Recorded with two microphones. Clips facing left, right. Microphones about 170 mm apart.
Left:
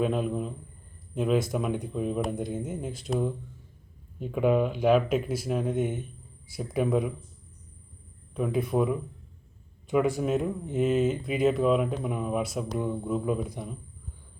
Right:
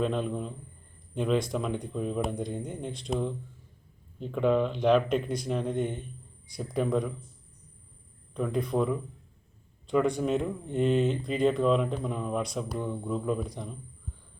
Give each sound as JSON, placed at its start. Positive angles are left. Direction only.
{"t": 0.0, "sound": "speech", "side_deg": 5}
{"t": 8.3, "sound": "speech", "side_deg": 5}